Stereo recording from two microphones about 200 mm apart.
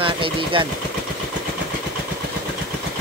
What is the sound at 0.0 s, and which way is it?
Speech, 25° right (ahead or behind).